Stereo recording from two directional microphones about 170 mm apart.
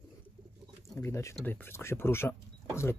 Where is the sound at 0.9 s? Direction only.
15° left (ahead or behind).